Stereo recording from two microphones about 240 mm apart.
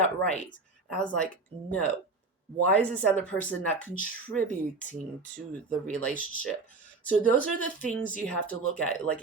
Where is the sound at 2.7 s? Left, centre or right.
Centre.